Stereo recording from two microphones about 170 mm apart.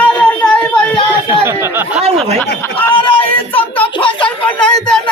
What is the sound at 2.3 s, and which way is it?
Speech, 10° left (ahead or behind).